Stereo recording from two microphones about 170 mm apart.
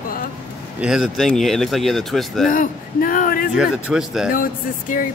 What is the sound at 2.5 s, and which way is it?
Speech, 55° left (ahead or behind).